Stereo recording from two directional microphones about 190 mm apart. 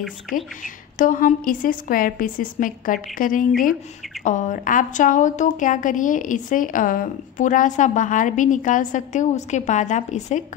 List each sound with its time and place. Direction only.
0.3 s a woman's voice: 45° left (ahead or behind)